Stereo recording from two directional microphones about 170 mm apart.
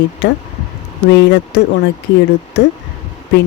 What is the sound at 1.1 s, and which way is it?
Speech, 90° left.